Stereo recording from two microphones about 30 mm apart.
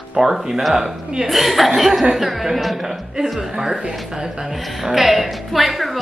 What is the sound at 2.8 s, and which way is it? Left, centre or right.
Speech, centre.